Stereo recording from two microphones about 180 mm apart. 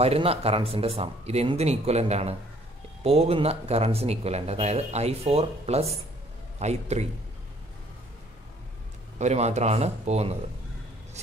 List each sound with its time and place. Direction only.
0.0 s speech: 35° right (ahead or behind)
9.2 s speech: 40° right (ahead or behind)